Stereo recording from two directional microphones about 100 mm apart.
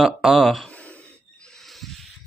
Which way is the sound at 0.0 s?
5° right (ahead or behind).